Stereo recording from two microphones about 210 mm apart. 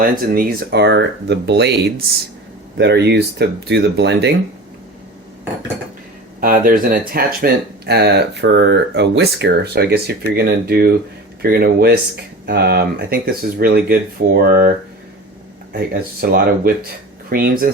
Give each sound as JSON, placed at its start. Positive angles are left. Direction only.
{"t": 0.0, "sound": "speech", "side_deg": -45}
{"t": 6.4, "sound": "speech", "side_deg": -40}
{"t": 16.2, "sound": "speech", "side_deg": -45}